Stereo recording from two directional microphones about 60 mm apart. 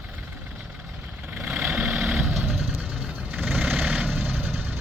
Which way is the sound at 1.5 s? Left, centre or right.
Right.